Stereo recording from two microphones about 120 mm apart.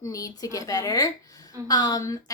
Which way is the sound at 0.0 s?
30° left (ahead or behind).